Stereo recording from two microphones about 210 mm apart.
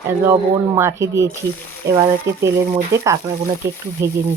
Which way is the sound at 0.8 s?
15° right (ahead or behind).